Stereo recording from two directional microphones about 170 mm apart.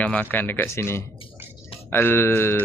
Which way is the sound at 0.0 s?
10° left (ahead or behind).